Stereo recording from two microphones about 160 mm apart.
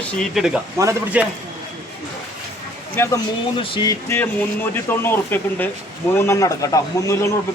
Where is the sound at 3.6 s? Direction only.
30° left (ahead or behind).